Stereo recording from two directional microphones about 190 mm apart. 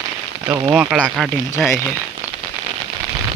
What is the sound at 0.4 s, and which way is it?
Speech, 15° right (ahead or behind).